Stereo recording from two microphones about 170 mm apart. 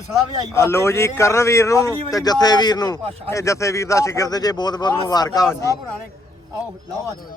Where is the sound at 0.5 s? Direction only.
15° left (ahead or behind).